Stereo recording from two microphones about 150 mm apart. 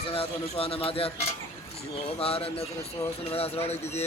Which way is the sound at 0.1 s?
40° left (ahead or behind).